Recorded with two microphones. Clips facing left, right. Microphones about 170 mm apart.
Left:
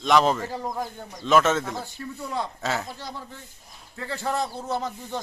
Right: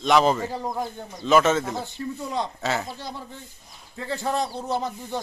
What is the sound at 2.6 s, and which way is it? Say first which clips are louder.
Speech: right 1 dB; centre (ahead or behind).